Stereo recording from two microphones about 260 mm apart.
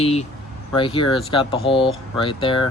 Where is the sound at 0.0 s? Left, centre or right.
Left.